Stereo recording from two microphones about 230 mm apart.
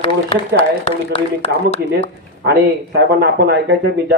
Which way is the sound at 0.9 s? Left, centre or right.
Left.